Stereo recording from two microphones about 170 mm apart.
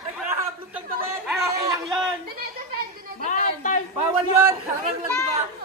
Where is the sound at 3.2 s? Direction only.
45° left (ahead or behind).